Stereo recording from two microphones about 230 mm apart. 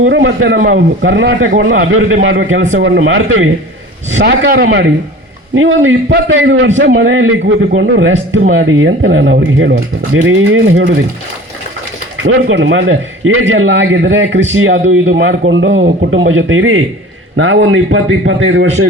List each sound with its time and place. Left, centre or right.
0.0 s a man's voice: right
5.5 s a man's voice: right
12.2 s a man's voice: right